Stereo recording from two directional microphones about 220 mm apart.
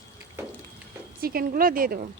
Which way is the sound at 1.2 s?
40° right (ahead or behind).